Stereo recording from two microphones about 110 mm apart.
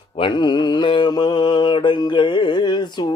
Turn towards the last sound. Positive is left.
turn(degrees=45)  # may be behind; listen again after turning